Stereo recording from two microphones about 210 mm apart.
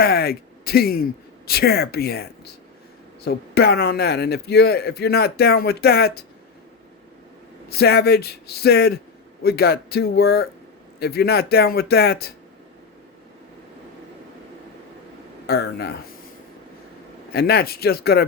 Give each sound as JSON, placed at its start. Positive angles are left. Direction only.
{"t": 0.0, "sound": "a man's voice", "side_deg": 45}
{"t": 7.7, "sound": "a man's voice", "side_deg": 50}
{"t": 15.4, "sound": "a man's voice", "side_deg": 50}
{"t": 17.3, "sound": "a man's voice", "side_deg": 50}